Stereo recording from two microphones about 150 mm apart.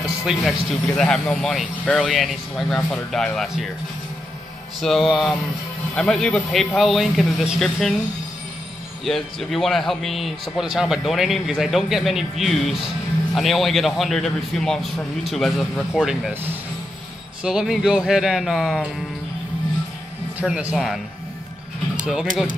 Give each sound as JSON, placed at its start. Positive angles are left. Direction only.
{"t": 0.0, "sound": "a man's voice", "side_deg": 0}
{"t": 4.8, "sound": "a man's voice", "side_deg": 0}
{"t": 9.0, "sound": "a man's voice", "side_deg": 0}
{"t": 17.4, "sound": "a man's voice", "side_deg": -5}
{"t": 20.3, "sound": "a man's voice", "side_deg": -5}
{"t": 22.0, "sound": "speech", "side_deg": -5}